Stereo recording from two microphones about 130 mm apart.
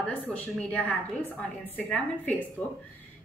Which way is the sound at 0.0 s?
10° left (ahead or behind).